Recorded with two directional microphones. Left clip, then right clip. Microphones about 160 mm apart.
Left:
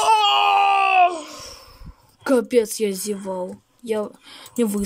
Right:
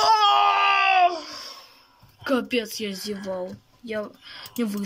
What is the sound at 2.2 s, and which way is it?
Speech, 35° left (ahead or behind).